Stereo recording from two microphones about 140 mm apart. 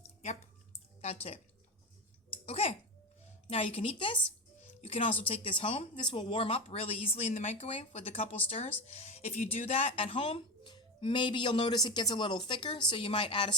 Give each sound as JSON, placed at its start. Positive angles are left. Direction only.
{"t": 1.0, "sound": "speech", "side_deg": 45}
{"t": 2.5, "sound": "speech", "side_deg": 45}